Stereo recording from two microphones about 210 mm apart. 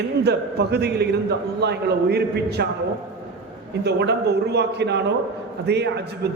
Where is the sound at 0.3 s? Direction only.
50° right (ahead or behind).